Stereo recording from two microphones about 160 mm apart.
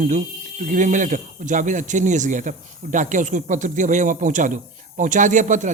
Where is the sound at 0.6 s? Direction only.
55° right (ahead or behind).